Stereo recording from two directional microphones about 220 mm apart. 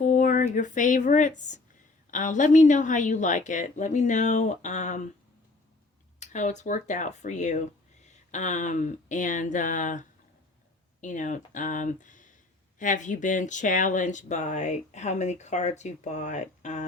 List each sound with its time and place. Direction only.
0.0 s speech: 35° left (ahead or behind)
6.1 s speech: 35° left (ahead or behind)